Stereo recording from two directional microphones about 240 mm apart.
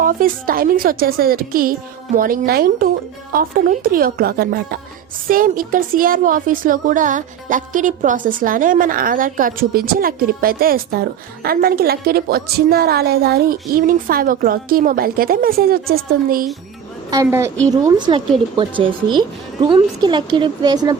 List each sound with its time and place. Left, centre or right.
0.0 s a woman's voice: right
17.1 s a woman's voice: centre